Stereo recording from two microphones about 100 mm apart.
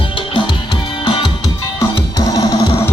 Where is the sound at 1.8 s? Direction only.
35° left (ahead or behind).